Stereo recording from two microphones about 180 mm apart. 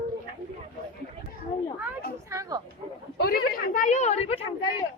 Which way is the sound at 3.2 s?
55° left (ahead or behind).